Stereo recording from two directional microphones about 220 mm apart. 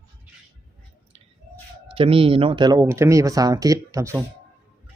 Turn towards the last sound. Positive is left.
turn(degrees=-15)  # may be behind; listen again after turning